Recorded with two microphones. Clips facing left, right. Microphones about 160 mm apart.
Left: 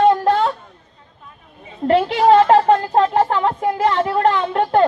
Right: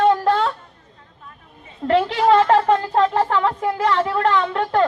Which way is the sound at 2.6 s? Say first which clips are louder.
Left 2 dB; 35° left (ahead or behind).